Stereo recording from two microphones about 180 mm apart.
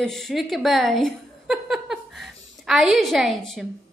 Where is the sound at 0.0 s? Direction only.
Centre (ahead or behind).